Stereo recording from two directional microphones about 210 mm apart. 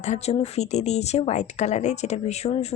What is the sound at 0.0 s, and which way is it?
Speech, 30° left (ahead or behind).